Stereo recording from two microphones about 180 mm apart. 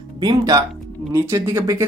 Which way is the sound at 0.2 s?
20° right (ahead or behind).